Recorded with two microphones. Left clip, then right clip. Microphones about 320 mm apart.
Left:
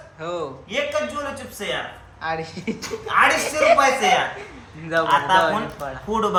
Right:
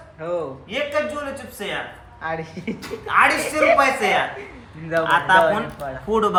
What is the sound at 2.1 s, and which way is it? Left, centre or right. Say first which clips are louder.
A man's voice: left 1 dB; centre.